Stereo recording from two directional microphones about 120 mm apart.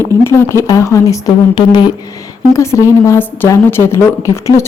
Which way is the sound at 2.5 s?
25° left (ahead or behind).